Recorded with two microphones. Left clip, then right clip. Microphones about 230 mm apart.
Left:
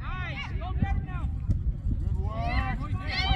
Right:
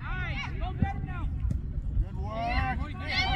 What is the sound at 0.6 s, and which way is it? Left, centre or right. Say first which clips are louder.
Vehicle: right 1 dB; centre.